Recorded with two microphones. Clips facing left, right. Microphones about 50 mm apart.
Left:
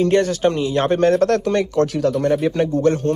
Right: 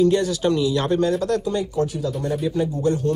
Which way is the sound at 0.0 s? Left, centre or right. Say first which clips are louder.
Left 2 dB; left.